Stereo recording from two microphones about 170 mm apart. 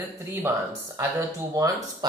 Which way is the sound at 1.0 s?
20° right (ahead or behind).